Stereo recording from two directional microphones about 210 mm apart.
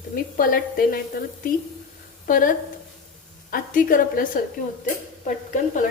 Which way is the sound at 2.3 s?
40° left (ahead or behind).